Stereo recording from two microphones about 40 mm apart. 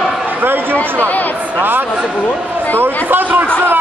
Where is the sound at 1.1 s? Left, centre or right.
Left.